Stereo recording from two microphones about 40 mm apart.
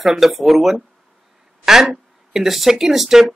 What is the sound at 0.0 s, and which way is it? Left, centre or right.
Speech, centre.